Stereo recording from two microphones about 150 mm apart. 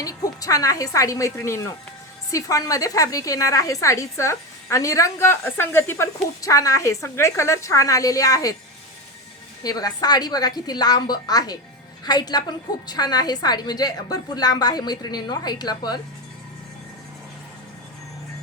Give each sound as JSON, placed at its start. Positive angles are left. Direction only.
{"t": 0.0, "sound": "a woman's voice", "side_deg": 25}
{"t": 9.6, "sound": "a woman's voice", "side_deg": 25}